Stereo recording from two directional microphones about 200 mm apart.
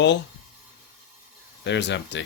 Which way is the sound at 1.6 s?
60° left (ahead or behind).